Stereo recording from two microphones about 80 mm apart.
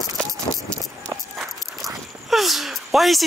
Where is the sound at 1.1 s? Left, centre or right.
Right.